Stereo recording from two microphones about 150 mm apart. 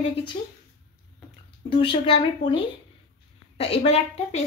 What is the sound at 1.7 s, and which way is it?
Speech, 35° left (ahead or behind).